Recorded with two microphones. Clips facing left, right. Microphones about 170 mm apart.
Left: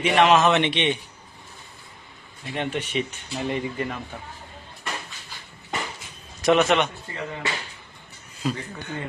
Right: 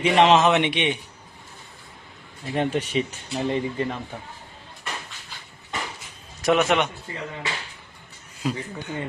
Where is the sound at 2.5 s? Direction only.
35° right (ahead or behind).